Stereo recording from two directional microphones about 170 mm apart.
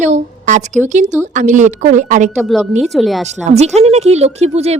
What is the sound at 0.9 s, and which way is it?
Speech, 45° right (ahead or behind).